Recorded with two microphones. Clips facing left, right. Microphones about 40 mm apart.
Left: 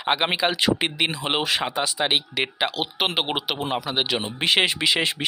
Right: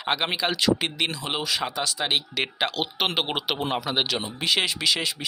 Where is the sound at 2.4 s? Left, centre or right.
Centre.